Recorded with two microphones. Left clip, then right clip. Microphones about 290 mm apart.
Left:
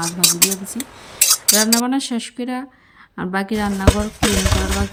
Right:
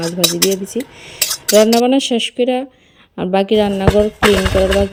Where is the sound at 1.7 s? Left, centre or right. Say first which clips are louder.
Right 8 dB; centre.